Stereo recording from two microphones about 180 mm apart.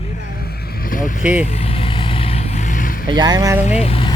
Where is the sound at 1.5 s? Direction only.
35° left (ahead or behind).